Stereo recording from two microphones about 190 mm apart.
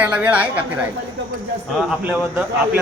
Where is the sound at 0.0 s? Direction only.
5° right (ahead or behind).